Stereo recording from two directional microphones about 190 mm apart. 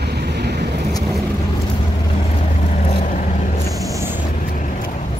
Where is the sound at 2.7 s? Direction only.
40° left (ahead or behind).